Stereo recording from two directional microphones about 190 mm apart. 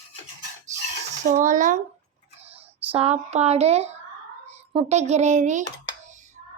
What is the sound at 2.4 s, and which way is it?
Speech, 30° right (ahead or behind).